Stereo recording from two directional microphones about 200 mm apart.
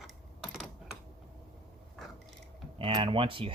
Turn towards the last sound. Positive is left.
turn(degrees=-25)  # may be behind; listen again after turning